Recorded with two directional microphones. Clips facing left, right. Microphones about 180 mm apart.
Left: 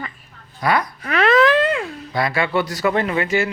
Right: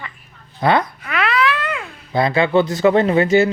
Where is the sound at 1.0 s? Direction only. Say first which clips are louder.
Left 5 dB; 40° left (ahead or behind).